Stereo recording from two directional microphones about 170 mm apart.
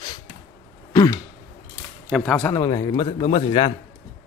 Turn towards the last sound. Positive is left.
turn(degrees=30)  # may be behind; listen again after turning